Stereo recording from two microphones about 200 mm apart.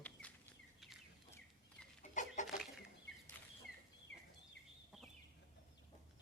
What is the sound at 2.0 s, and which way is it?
Chicken, 40° left (ahead or behind).